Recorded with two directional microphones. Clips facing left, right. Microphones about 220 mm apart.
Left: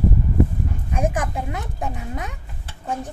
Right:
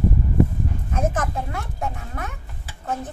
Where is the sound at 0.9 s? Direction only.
15° left (ahead or behind).